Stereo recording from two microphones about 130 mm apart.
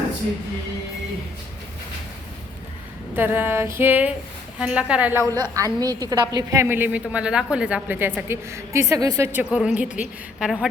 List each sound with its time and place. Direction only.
3.2 s a woman's voice: 15° right (ahead or behind)
5.3 s a woman's voice: 25° right (ahead or behind)
9.4 s a woman's voice: 5° right (ahead or behind)